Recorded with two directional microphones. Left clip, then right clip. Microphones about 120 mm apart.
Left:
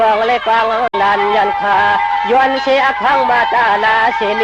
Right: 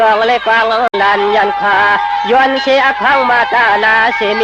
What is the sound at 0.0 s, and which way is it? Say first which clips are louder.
Speech: right 2 dB; 45° right (ahead or behind).